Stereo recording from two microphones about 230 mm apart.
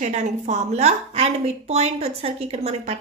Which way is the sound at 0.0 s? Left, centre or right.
Right.